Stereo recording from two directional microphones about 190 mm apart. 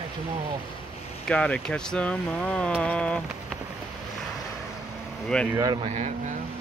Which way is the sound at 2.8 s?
5° left (ahead or behind).